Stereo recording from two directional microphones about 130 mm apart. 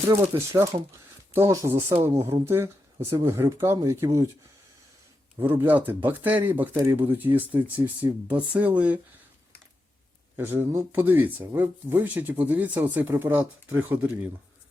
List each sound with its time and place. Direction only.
0.1 s speech: 20° right (ahead or behind)
5.4 s speech: 15° right (ahead or behind)
10.3 s speech: 15° right (ahead or behind)